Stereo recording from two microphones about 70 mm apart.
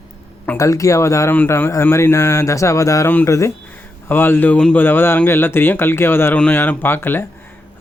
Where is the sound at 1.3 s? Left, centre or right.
Left.